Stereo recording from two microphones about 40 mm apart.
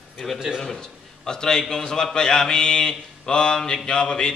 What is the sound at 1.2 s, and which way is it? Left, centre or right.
A man's voice, centre.